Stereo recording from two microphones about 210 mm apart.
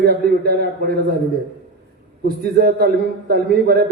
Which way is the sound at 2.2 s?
50° right (ahead or behind).